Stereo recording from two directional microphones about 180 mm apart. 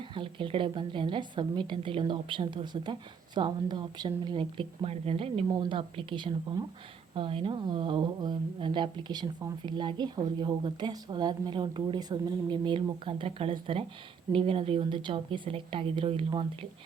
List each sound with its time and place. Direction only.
0.1 s speech: 30° right (ahead or behind)